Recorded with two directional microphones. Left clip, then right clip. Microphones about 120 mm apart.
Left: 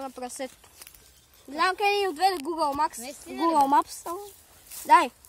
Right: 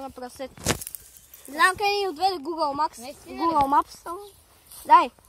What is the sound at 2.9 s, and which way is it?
Speech, 40° left (ahead or behind).